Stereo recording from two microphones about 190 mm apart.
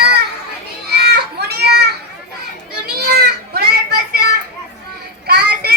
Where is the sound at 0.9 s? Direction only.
60° right (ahead or behind).